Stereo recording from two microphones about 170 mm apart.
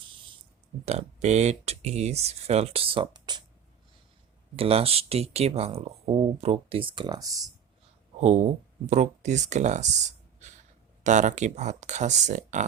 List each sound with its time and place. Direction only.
0.9 s speech: 40° right (ahead or behind)
4.5 s speech: 35° right (ahead or behind)
8.2 s speech: 40° right (ahead or behind)